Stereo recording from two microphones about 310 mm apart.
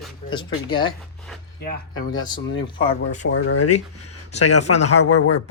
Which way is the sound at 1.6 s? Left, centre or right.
Left.